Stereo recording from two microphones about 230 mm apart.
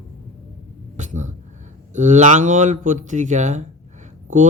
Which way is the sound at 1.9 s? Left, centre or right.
Right.